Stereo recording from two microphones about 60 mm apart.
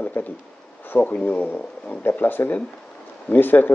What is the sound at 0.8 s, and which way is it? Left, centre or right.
Bee, left.